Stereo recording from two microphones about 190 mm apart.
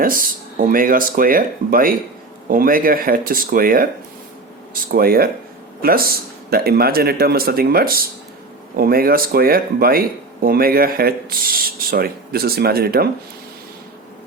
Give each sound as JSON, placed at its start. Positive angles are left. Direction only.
{"t": 0.0, "sound": "speech", "side_deg": -45}